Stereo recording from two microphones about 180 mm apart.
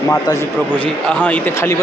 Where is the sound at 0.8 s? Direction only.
5° left (ahead or behind).